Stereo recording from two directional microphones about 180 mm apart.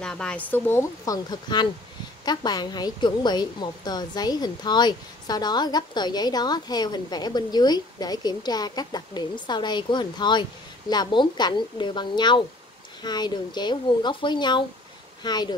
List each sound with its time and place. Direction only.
0.0 s a woman's voice: 5° left (ahead or behind); by 15.5 s 25° left (ahead or behind)